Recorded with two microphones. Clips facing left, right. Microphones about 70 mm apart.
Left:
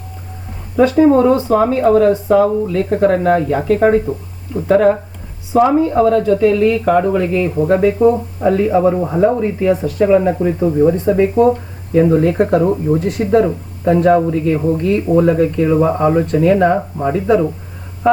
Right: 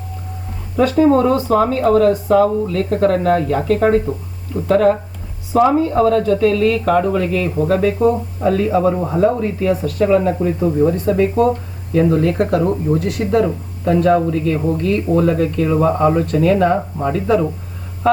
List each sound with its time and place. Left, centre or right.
0.8 s speech: centre
10.9 s speech: left